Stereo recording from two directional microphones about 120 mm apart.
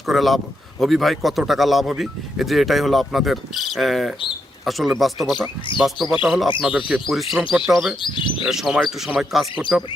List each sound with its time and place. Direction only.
0.1 s speech: centre (ahead or behind)
8.0 s speech: 45° left (ahead or behind)
8.4 s speech: 5° right (ahead or behind)